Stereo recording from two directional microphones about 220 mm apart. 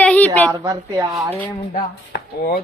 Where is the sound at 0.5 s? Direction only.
15° right (ahead or behind).